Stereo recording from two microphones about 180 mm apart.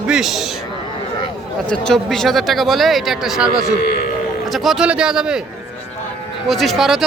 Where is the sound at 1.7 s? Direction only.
5° left (ahead or behind).